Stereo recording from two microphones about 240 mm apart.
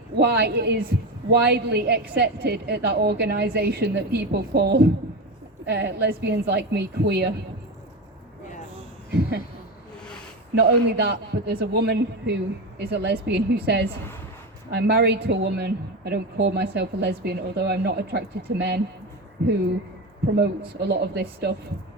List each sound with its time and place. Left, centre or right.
0.2 s a woman's voice: right
10.5 s a woman's voice: right
20.7 s a woman's voice: right